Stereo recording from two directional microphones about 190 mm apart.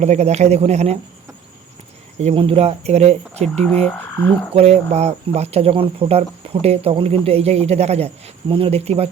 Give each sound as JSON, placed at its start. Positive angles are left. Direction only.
{"t": 0.0, "sound": "speech", "side_deg": -35}
{"t": 2.1, "sound": "speech", "side_deg": -30}
{"t": 3.4, "sound": "frog", "side_deg": 5}
{"t": 4.5, "sound": "speech", "side_deg": -35}